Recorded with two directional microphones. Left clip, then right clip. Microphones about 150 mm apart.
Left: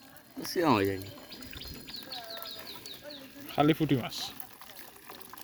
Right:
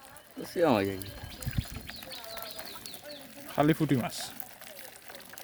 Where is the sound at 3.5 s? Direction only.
35° right (ahead or behind).